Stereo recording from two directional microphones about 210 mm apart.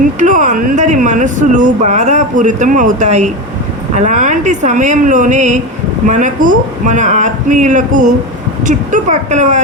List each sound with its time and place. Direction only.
0.2 s speech: 35° right (ahead or behind)